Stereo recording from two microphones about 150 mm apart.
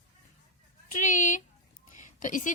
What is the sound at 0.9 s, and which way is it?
Speech, 60° left (ahead or behind).